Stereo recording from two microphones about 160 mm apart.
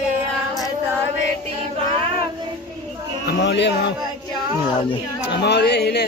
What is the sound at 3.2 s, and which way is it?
Speech, 90° left.